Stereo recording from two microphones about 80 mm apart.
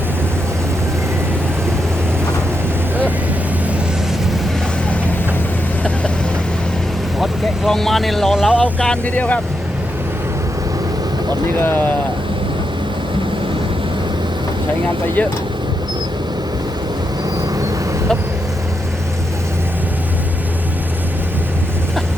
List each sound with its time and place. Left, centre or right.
7.2 s speech: centre
8.5 s speech: centre
11.6 s speech: left